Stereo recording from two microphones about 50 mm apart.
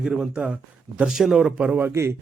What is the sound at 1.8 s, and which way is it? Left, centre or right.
Speech, right.